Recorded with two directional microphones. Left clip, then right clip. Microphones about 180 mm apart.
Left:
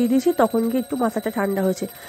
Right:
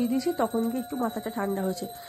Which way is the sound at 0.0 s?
25° left (ahead or behind).